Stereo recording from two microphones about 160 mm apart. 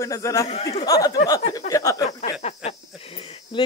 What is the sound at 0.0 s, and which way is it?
Speech, 20° left (ahead or behind).